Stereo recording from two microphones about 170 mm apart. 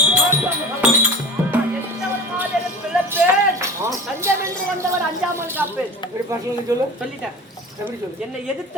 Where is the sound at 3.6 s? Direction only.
15° right (ahead or behind).